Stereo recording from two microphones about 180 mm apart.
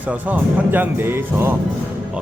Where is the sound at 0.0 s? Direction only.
10° right (ahead or behind).